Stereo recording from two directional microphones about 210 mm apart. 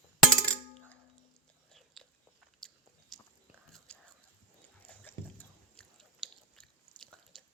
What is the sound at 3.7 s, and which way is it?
Whispering, 5° left (ahead or behind).